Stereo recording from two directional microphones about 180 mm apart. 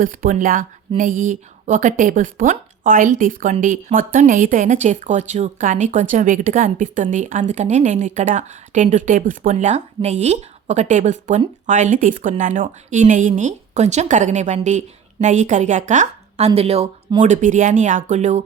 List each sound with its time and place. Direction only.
0.0 s a woman's voice: 50° right (ahead or behind)